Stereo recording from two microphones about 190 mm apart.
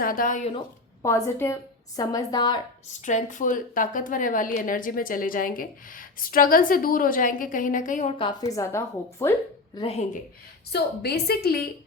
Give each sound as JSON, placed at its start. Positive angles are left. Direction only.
{"t": 0.0, "sound": "a woman's voice", "side_deg": 45}
{"t": 1.0, "sound": "a woman's voice", "side_deg": 15}
{"t": 3.0, "sound": "a woman's voice", "side_deg": 40}
{"t": 8.2, "sound": "a woman's voice", "side_deg": 20}
{"t": 9.7, "sound": "a woman's voice", "side_deg": 30}
{"t": 10.7, "sound": "a woman's voice", "side_deg": 60}